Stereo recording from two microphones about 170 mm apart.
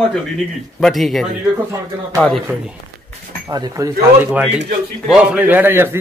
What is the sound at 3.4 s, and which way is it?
Speech, 20° right (ahead or behind).